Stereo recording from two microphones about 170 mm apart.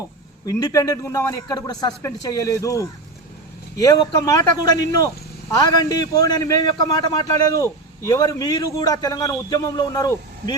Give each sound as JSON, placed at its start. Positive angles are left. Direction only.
{"t": 0.4, "sound": "speech", "side_deg": 20}